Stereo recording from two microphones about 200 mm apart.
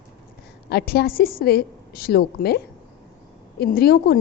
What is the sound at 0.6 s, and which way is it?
A woman's voice, 55° left (ahead or behind).